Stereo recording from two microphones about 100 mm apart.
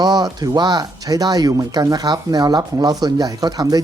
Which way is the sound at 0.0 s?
40° right (ahead or behind).